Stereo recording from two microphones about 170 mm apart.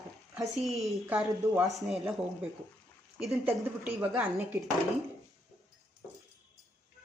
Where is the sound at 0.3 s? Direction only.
Centre (ahead or behind).